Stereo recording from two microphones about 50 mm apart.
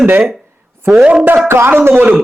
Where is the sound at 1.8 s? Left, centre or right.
Right.